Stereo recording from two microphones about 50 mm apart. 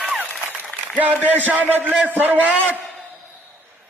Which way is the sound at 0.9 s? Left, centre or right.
Right.